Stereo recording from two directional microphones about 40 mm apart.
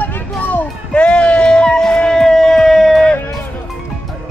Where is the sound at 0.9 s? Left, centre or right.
Left; by 3.0 s centre.